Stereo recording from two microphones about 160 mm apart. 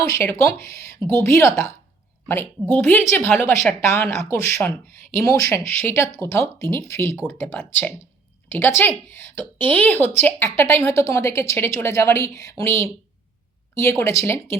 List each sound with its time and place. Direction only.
0.1 s speech: 15° left (ahead or behind)
14.0 s speech: 20° left (ahead or behind)